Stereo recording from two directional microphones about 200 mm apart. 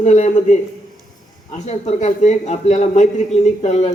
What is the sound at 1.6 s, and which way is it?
Speech, 35° left (ahead or behind).